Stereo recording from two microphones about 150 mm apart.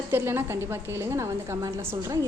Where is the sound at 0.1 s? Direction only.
15° right (ahead or behind).